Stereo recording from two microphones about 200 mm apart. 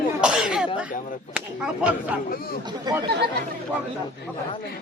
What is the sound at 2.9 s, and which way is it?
Speech, 20° right (ahead or behind).